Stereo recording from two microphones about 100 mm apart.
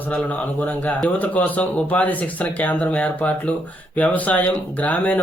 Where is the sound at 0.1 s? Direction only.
15° left (ahead or behind).